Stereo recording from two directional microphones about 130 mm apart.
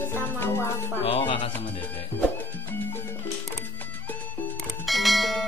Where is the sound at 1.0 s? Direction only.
45° left (ahead or behind).